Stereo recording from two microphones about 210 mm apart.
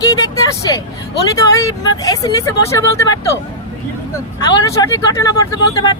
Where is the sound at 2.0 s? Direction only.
15° left (ahead or behind).